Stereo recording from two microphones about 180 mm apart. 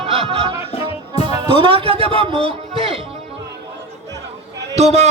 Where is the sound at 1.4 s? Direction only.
30° right (ahead or behind).